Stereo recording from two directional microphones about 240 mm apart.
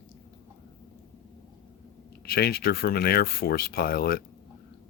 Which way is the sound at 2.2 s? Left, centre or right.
Left.